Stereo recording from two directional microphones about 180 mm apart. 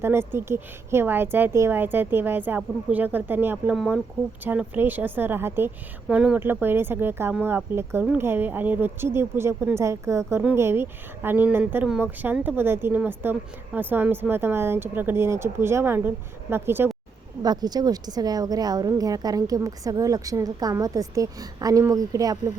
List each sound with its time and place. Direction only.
0.0 s a woman's voice: 15° right (ahead or behind)